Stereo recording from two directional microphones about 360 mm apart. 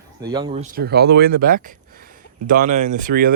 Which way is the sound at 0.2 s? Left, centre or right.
Centre.